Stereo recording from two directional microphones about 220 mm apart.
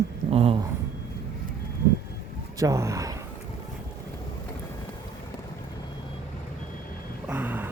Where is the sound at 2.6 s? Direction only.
15° right (ahead or behind).